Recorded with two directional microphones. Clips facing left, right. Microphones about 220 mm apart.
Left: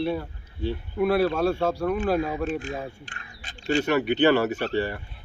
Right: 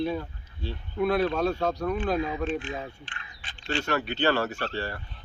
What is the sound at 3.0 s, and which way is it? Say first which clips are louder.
Speech: left 2 dB; 40° left (ahead or behind).